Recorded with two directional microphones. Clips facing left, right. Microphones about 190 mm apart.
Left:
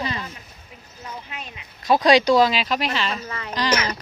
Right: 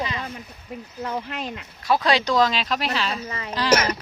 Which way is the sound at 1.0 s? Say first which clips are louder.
Right 7 dB; 70° right (ahead or behind).